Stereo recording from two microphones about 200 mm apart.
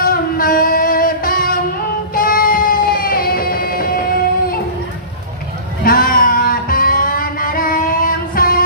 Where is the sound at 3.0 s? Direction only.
45° left (ahead or behind).